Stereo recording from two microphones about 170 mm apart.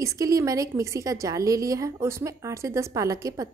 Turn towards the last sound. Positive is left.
turn(degrees=-20)  # may be behind; listen again after turning